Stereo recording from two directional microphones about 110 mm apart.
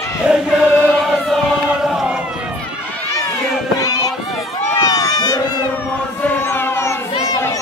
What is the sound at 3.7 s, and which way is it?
Run, 35° left (ahead or behind).